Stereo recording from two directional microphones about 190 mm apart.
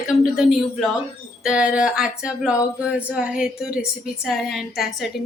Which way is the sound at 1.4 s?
5° right (ahead or behind).